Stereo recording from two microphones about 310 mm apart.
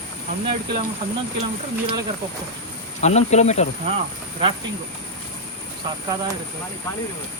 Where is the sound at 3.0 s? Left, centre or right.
Left.